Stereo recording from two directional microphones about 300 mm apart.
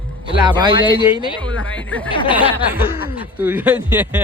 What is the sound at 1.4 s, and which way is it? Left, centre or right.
Speech, centre.